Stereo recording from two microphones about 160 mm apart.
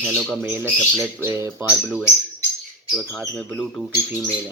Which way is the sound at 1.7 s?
Centre (ahead or behind).